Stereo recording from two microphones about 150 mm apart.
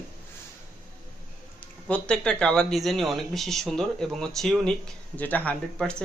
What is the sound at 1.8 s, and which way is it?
Speech, 10° left (ahead or behind).